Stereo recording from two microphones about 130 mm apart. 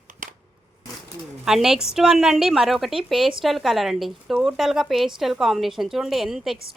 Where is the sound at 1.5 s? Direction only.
5° right (ahead or behind).